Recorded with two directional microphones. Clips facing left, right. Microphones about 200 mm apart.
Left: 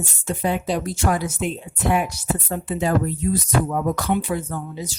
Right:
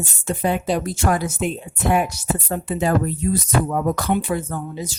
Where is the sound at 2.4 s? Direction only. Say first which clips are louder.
Right 2 dB; 55° right (ahead or behind).